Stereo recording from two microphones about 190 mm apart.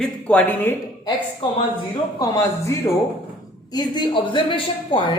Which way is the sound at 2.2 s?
15° left (ahead or behind).